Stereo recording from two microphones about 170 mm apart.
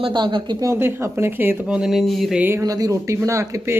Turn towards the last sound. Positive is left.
turn(degrees=-20)  # may be behind; listen again after turning